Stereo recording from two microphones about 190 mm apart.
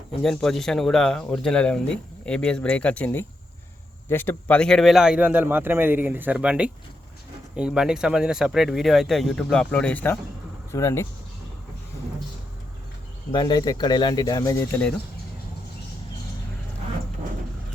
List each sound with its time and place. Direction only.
0.2 s a man's voice: centre (ahead or behind)
13.3 s speech: 25° left (ahead or behind)